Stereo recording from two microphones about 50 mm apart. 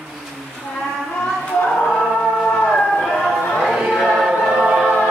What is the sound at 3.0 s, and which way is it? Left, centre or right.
Chatter, centre.